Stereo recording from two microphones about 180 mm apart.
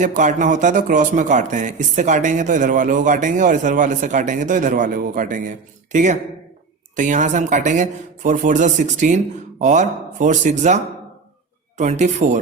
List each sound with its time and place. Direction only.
0.0 s speech: 45° right (ahead or behind)
11.8 s speech: 40° right (ahead or behind)